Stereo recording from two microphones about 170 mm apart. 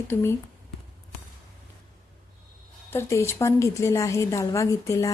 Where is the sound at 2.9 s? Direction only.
15° left (ahead or behind).